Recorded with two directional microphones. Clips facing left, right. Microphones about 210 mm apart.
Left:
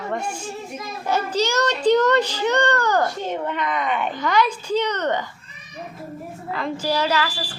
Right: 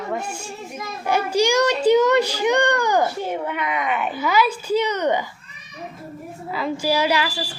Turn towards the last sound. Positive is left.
turn(degrees=-15)  # may be behind; listen again after turning